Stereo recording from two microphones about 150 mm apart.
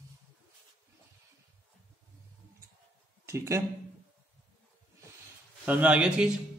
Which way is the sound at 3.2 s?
20° right (ahead or behind).